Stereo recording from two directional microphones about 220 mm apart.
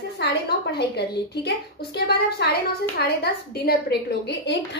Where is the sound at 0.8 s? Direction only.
50° left (ahead or behind).